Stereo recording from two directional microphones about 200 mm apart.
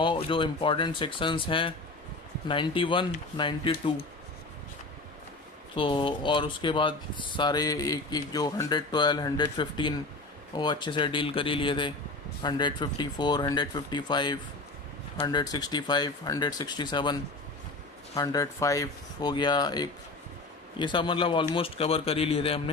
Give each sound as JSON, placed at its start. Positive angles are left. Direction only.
{"t": 0.0, "sound": "speech", "side_deg": 25}
{"t": 5.7, "sound": "speech", "side_deg": 25}